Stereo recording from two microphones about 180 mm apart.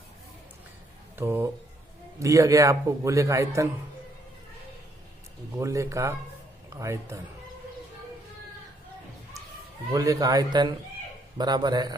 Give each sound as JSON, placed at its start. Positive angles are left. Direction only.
{"t": 1.1, "sound": "a man's voice", "side_deg": -15}
{"t": 5.5, "sound": "a man's voice", "side_deg": -15}
{"t": 9.9, "sound": "speech", "side_deg": -20}